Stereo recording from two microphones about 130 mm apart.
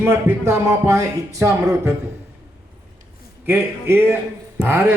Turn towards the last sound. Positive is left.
turn(degrees=-15)  # may be behind; listen again after turning